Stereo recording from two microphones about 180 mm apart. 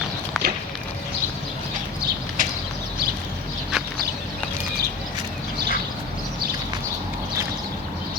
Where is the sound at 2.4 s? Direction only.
45° right (ahead or behind).